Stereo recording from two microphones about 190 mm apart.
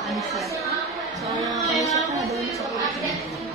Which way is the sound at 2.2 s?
Centre (ahead or behind).